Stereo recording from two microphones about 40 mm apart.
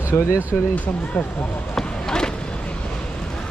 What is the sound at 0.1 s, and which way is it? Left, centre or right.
Speech, left.